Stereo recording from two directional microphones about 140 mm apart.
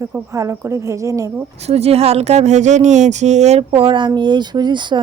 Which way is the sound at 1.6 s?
45° right (ahead or behind).